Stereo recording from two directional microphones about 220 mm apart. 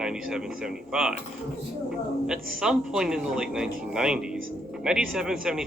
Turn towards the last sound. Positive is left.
turn(degrees=-5)  # may be behind; listen again after turning